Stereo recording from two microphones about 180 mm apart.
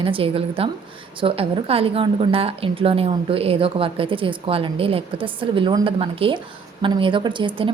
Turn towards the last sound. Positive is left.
turn(degrees=-25)  # may be behind; listen again after turning